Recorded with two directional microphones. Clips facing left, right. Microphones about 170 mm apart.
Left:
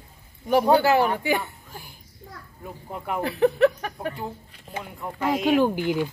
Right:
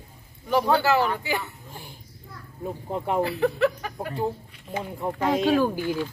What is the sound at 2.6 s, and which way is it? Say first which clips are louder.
Speech: right 7 dB; 30° right (ahead or behind).